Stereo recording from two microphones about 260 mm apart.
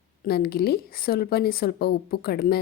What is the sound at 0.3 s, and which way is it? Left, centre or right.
A woman's voice, left.